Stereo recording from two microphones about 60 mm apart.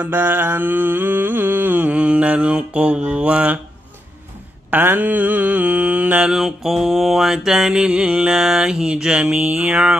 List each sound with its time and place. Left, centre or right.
0.0 s mantra: right
4.6 s mantra: right
6.2 s mantra: centre